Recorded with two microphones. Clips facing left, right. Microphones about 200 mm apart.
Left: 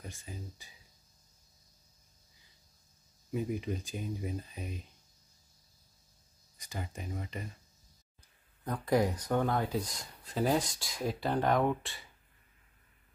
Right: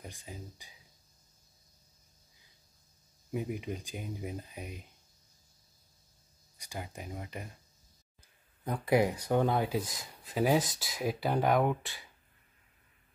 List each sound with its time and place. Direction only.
0.0 s speech: 15° right (ahead or behind)
3.3 s speech: 15° right (ahead or behind)
6.6 s speech: 10° right (ahead or behind)
8.6 s speech: 10° right (ahead or behind)